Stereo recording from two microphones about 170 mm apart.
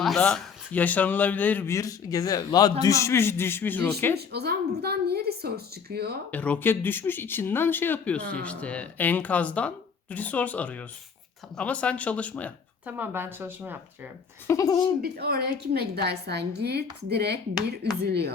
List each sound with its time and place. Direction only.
0.0 s speech: 5° left (ahead or behind)
4.3 s a woman's voice: 70° right (ahead or behind)
6.3 s speech: 10° left (ahead or behind)
12.8 s a woman's voice: 10° right (ahead or behind)
14.4 s speech: 20° left (ahead or behind)
15.0 s a woman's voice: 65° right (ahead or behind)